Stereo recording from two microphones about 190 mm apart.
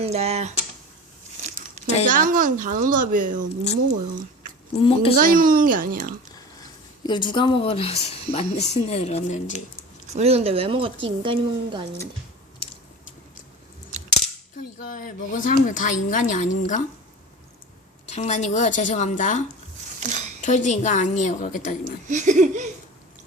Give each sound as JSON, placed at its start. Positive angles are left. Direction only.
{"t": 0.0, "sound": "speech", "side_deg": -35}
{"t": 1.4, "sound": "crumpling", "side_deg": -40}
{"t": 2.0, "sound": "a woman's voice", "side_deg": -45}
{"t": 4.7, "sound": "speech", "side_deg": 30}
{"t": 5.2, "sound": "a woman's voice", "side_deg": -45}
{"t": 7.0, "sound": "speech", "side_deg": 25}
{"t": 10.1, "sound": "a woman's voice", "side_deg": -35}
{"t": 14.9, "sound": "speech", "side_deg": 45}
{"t": 18.1, "sound": "speech", "side_deg": 35}
{"t": 20.4, "sound": "speech", "side_deg": 40}
{"t": 22.1, "sound": "speech", "side_deg": -40}